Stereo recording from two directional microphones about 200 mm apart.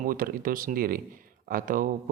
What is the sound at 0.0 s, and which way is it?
Speech, 45° right (ahead or behind).